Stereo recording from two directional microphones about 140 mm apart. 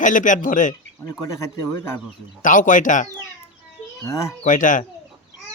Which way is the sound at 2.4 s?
65° left (ahead or behind).